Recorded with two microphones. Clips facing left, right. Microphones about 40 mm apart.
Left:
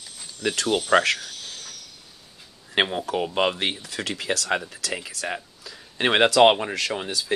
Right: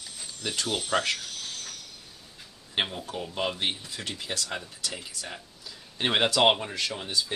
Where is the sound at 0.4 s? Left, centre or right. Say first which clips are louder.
Left 7 dB; left.